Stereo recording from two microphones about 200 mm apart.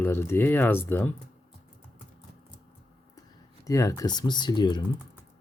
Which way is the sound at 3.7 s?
15° left (ahead or behind).